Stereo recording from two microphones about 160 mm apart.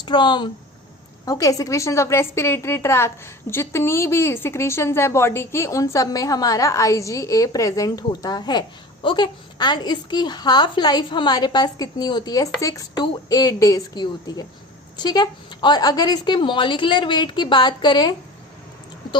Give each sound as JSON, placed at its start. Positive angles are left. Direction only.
{"t": 0.0, "sound": "a woman's voice", "side_deg": 30}